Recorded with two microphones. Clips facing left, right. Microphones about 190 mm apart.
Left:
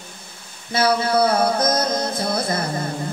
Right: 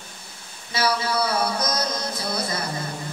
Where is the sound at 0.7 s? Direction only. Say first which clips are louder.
Left 6 dB; 55° left (ahead or behind).